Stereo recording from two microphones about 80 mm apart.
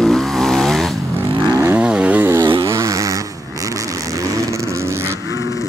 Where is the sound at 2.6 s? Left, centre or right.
Right.